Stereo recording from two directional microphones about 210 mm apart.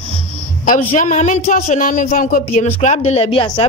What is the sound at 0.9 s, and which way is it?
Speech, 35° left (ahead or behind).